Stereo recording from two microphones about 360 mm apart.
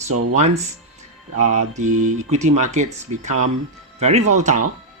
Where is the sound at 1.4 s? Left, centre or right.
Right.